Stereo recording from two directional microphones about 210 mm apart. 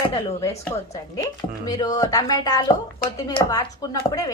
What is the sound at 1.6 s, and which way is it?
A woman's voice, 20° left (ahead or behind).